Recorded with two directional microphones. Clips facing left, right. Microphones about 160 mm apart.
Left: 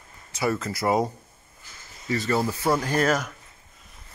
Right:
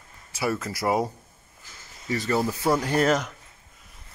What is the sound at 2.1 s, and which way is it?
Speech, 15° right (ahead or behind).